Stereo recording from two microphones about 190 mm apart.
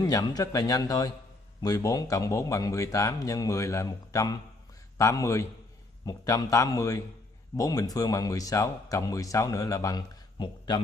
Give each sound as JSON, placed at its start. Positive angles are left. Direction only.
{"t": 0.0, "sound": "speech", "side_deg": 20}